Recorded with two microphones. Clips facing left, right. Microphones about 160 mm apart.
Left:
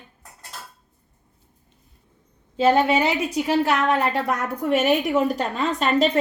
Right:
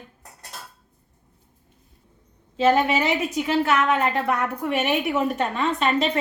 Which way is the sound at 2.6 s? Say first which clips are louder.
Left 1 dB; 35° left (ahead or behind).